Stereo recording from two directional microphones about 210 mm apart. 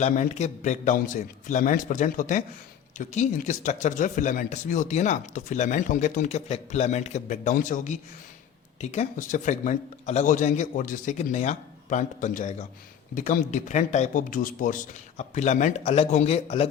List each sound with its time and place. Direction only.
0.0 s speech: 35° left (ahead or behind)